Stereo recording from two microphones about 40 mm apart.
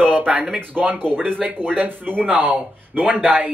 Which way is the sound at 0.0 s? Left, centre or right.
Right.